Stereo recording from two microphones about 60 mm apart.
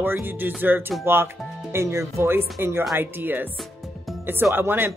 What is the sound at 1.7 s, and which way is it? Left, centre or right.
Speech, right.